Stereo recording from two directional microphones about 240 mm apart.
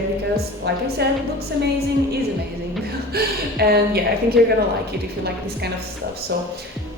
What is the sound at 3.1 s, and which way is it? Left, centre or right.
A woman's voice, right.